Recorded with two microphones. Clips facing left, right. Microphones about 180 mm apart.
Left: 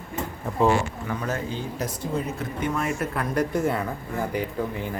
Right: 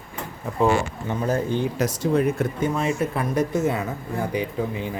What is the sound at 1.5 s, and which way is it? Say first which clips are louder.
Speech: right 7 dB; 90° right.